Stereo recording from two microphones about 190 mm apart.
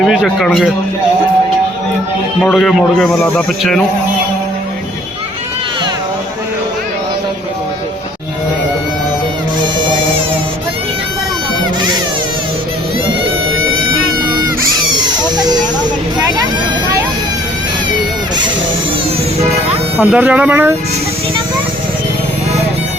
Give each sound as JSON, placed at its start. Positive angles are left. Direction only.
{"t": 0.0, "sound": "a man's voice", "side_deg": 0}
{"t": 2.4, "sound": "a man's voice", "side_deg": 5}
{"t": 13.5, "sound": "cat", "side_deg": -90}
{"t": 14.9, "sound": "a sound", "side_deg": -20}
{"t": 20.0, "sound": "speech", "side_deg": -5}